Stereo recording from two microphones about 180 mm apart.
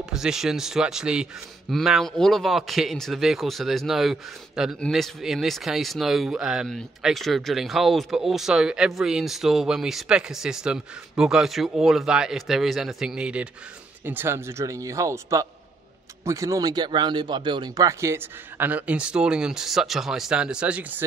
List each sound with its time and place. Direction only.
0.1 s speech: 5° right (ahead or behind)